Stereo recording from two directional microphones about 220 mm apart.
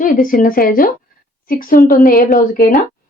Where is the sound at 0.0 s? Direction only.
40° left (ahead or behind).